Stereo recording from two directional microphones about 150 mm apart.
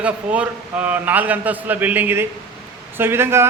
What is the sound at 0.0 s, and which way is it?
A man's voice, 10° right (ahead or behind).